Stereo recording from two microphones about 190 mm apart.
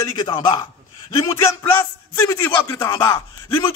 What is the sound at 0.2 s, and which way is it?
Speech, 25° left (ahead or behind).